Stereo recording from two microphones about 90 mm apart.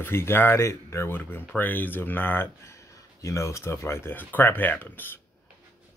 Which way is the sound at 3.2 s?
35° left (ahead or behind).